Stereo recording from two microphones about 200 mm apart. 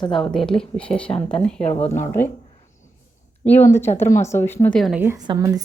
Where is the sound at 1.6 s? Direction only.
30° left (ahead or behind).